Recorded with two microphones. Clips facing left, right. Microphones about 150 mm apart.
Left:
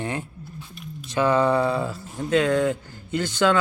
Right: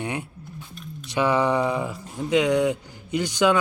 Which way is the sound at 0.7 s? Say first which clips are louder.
Left 1 dB; 5° left (ahead or behind).